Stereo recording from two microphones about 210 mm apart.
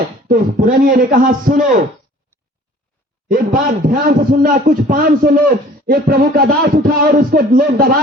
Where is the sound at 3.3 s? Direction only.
40° right (ahead or behind).